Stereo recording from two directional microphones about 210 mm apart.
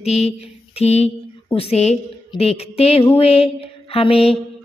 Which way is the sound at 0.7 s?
30° left (ahead or behind).